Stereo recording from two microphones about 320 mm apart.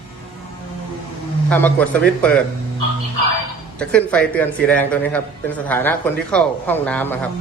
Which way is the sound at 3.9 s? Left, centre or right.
Centre.